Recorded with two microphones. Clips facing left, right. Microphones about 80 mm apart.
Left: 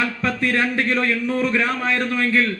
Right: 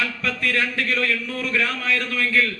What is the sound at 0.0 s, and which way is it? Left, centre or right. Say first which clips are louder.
A man's voice: left 3 dB; left.